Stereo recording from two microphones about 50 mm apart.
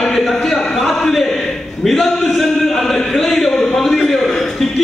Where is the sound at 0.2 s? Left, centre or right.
Centre.